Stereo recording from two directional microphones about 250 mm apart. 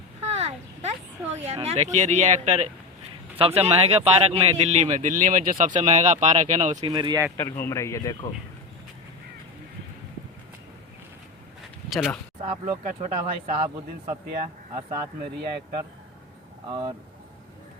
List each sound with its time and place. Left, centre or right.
0.2 s a sound: right
1.6 s speech: right
6.8 s speech: centre
7.3 s a man's voice: centre
11.9 s speech: centre
12.5 s speech: centre
12.8 s speech: right
14.8 s speech: right